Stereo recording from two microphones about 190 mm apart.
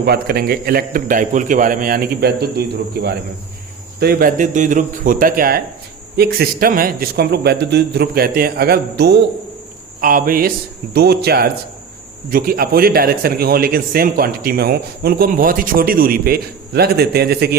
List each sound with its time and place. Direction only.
0.0 s a man's voice: 55° right (ahead or behind)
10.0 s a man's voice: 45° right (ahead or behind)